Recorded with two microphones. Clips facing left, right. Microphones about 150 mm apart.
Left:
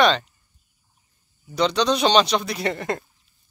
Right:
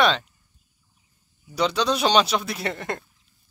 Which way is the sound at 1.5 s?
5° right (ahead or behind).